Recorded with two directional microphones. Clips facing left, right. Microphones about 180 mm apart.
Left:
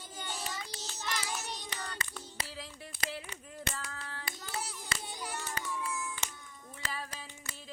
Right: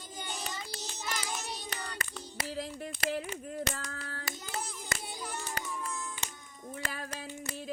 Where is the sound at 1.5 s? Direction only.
10° right (ahead or behind).